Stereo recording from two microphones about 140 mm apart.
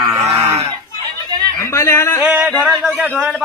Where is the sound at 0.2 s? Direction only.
20° right (ahead or behind).